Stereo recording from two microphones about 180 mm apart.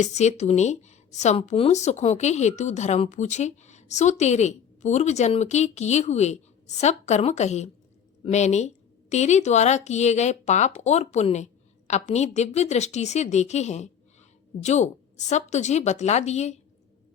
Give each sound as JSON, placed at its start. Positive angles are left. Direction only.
{"t": 0.0, "sound": "speech", "side_deg": 40}